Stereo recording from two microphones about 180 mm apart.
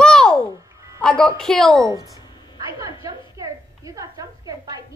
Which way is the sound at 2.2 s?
25° left (ahead or behind).